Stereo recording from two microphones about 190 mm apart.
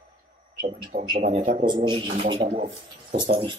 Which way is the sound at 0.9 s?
50° right (ahead or behind).